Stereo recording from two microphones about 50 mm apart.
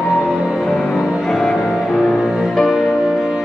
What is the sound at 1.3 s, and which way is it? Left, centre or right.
Music, centre.